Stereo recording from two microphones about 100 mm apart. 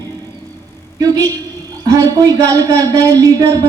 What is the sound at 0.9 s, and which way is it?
A woman's voice, 40° right (ahead or behind).